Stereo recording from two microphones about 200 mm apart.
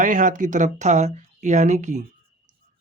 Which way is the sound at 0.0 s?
40° right (ahead or behind).